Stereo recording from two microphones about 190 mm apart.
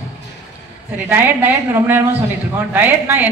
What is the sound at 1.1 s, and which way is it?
A woman's voice, 10° right (ahead or behind).